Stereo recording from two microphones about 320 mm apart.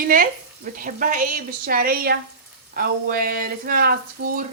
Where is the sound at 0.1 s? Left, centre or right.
Right.